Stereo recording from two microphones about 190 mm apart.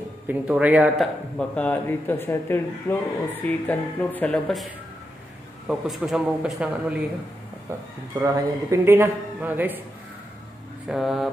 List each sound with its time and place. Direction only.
0.3 s speech: 10° right (ahead or behind)
1.5 s speech: 10° left (ahead or behind)
5.7 s speech: centre (ahead or behind)
8.2 s speech: 15° right (ahead or behind)
10.9 s speech: centre (ahead or behind)